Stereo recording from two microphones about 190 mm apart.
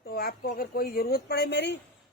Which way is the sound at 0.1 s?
50° left (ahead or behind).